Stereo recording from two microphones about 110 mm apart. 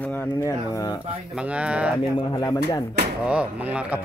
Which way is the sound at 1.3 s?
10° right (ahead or behind).